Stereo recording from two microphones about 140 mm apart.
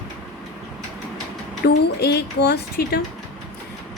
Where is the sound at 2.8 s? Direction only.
90° left.